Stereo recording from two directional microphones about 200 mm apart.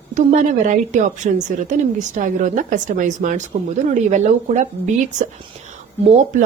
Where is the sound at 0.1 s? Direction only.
40° right (ahead or behind).